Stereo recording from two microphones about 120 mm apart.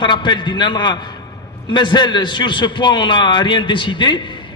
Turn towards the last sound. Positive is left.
turn(degrees=40)  # may be behind; listen again after turning